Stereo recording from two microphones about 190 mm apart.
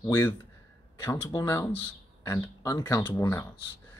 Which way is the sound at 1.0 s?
10° left (ahead or behind).